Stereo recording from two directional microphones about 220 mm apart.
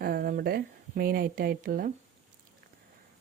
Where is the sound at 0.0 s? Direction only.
40° right (ahead or behind).